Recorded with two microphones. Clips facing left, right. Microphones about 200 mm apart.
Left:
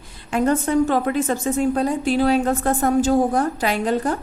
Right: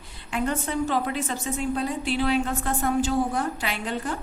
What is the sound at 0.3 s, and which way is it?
A woman's voice, 45° left (ahead or behind).